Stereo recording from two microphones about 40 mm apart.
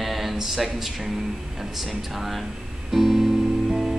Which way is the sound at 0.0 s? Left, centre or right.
Centre.